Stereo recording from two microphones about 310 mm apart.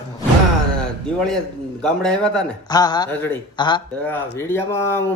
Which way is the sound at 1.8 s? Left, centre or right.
Centre.